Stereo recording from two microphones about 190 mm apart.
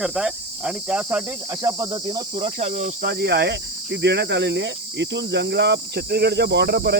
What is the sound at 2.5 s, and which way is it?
Cricket, 40° right (ahead or behind).